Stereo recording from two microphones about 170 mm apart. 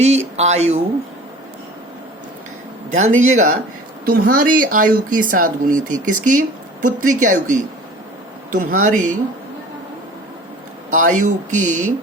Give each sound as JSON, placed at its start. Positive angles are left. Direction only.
{"t": 0.0, "sound": "speech", "side_deg": -40}
{"t": 3.2, "sound": "speech", "side_deg": -45}
{"t": 4.0, "sound": "speech", "side_deg": -60}
{"t": 10.9, "sound": "speech", "side_deg": -50}